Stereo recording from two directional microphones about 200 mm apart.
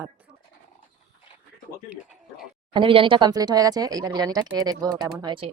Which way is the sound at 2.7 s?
25° right (ahead or behind).